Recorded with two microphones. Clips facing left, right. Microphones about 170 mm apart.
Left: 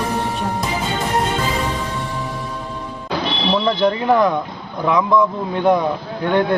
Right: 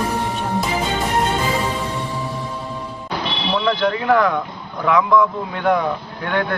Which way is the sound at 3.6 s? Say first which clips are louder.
Left 1 dB; 25° left (ahead or behind).